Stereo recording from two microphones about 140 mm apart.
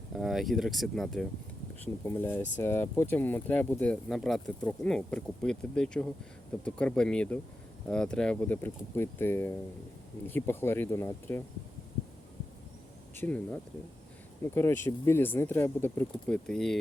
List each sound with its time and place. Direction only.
0.1 s speech: centre (ahead or behind)
1.8 s speech: 15° left (ahead or behind)
13.1 s speech: 15° left (ahead or behind)